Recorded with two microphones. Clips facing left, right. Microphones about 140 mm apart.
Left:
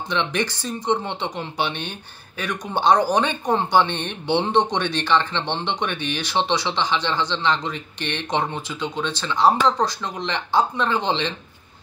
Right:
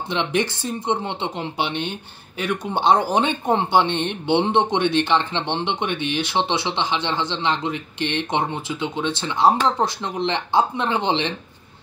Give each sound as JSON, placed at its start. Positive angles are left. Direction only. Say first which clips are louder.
{"t": 0.1, "sound": "speech", "louder": "right 2 dB", "side_deg": -20}